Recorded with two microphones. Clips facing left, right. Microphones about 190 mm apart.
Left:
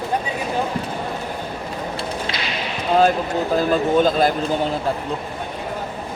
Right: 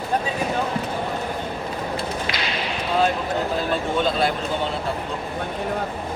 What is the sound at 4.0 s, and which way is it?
Speech, 40° left (ahead or behind).